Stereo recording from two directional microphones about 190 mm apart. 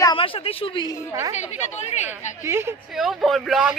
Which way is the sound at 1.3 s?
35° left (ahead or behind).